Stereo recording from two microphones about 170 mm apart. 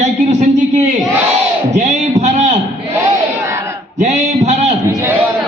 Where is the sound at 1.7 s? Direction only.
45° right (ahead or behind).